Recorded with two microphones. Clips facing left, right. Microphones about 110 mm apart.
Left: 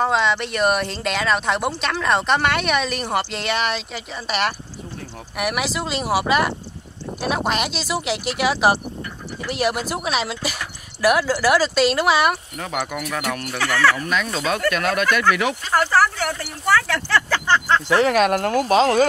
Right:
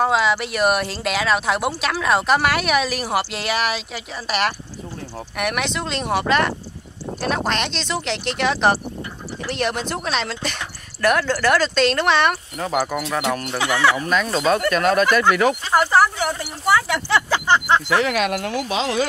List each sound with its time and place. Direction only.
0.0 s speech: 5° right (ahead or behind)
12.5 s speech: 35° right (ahead or behind); by 14.0 s 20° right (ahead or behind)
14.0 s speech: 40° right (ahead or behind)
15.7 s speech: 20° right (ahead or behind)
17.8 s speech: 35° left (ahead or behind)